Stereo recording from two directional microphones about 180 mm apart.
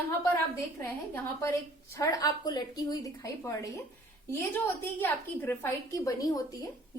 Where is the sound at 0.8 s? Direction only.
15° left (ahead or behind).